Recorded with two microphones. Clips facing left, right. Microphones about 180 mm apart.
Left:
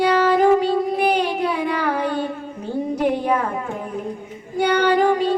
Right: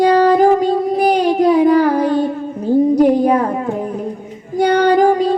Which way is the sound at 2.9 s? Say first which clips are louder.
Right 8 dB; 40° right (ahead or behind).